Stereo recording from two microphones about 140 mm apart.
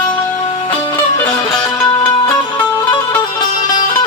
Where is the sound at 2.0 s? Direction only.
35° left (ahead or behind).